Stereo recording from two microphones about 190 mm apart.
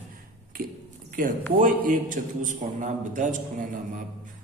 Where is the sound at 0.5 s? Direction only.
50° right (ahead or behind).